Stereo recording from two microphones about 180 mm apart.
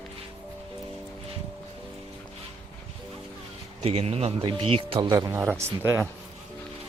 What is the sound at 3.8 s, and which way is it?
Speech, 35° right (ahead or behind).